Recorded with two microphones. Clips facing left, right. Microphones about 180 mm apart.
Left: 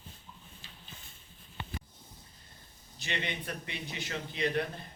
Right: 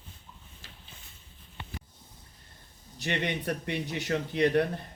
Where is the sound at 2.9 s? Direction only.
65° right (ahead or behind).